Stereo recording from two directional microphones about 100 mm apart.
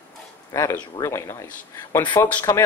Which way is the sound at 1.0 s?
30° left (ahead or behind).